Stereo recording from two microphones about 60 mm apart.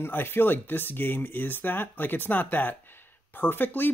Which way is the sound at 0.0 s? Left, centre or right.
Left.